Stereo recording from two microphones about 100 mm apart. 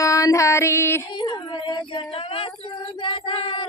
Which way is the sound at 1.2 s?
50° left (ahead or behind).